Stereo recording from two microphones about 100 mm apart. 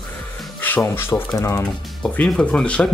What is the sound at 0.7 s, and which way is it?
Speech, 25° left (ahead or behind).